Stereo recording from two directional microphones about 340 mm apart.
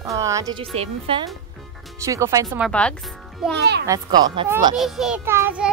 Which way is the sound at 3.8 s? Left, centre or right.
Centre.